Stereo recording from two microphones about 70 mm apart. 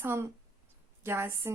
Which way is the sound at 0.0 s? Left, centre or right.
Right.